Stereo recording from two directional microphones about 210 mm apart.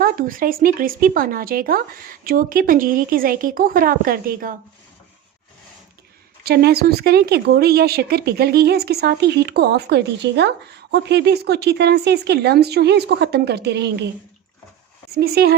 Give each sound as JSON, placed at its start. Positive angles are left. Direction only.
{"t": 0.0, "sound": "speech", "side_deg": -40}
{"t": 6.4, "sound": "speech", "side_deg": -50}
{"t": 15.1, "sound": "speech", "side_deg": -50}